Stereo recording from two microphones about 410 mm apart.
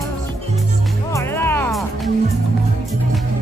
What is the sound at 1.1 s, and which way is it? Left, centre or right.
Music, centre.